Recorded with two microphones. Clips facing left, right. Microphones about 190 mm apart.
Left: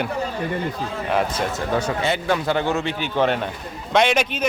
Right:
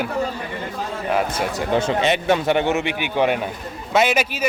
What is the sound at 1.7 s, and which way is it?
Speech, 25° right (ahead or behind).